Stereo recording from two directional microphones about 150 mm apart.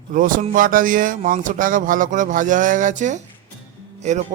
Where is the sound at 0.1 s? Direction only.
65° right (ahead or behind).